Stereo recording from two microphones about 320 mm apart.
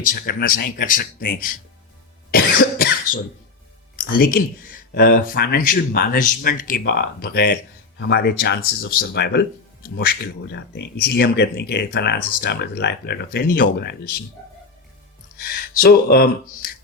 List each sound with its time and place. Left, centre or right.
0.1 s speech: left
2.3 s cough: left
3.9 s speech: left
15.8 s speech: left